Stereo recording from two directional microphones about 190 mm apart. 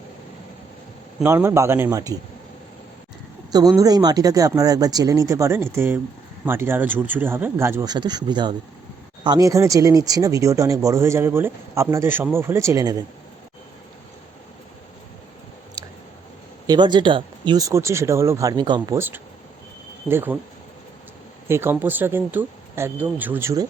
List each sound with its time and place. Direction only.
1.2 s speech: 15° right (ahead or behind)
3.8 s speech: 20° right (ahead or behind)
16.6 s speech: 25° right (ahead or behind)
18.9 s speech: 10° right (ahead or behind)
21.4 s speech: 10° right (ahead or behind)